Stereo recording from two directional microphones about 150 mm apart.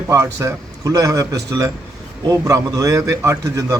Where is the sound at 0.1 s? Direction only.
20° right (ahead or behind).